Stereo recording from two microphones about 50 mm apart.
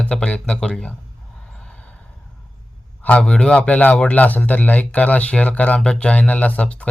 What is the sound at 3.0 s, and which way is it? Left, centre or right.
A man's voice, left.